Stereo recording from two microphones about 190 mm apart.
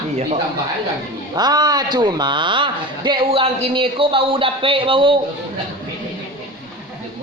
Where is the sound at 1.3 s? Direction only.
20° right (ahead or behind).